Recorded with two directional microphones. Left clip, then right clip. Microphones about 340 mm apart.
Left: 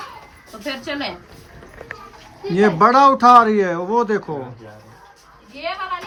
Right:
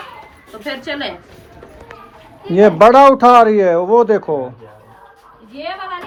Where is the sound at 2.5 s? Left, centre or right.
Centre.